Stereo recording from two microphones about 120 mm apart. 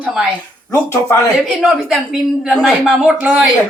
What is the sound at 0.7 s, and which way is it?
Speech, 20° left (ahead or behind).